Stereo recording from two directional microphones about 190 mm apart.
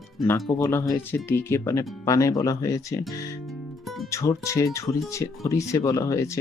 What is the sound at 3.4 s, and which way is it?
Guitar, centre (ahead or behind).